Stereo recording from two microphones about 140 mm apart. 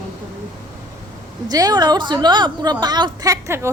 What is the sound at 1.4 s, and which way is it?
A woman's voice, 25° right (ahead or behind).